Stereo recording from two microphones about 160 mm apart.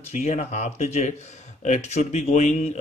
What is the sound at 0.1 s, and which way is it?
Speech, 45° left (ahead or behind).